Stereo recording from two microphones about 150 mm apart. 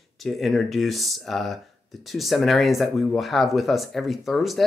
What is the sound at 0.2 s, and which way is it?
Speech, centre (ahead or behind).